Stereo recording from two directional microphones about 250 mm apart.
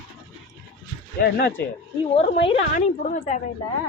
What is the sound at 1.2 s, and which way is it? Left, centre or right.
Speech, left.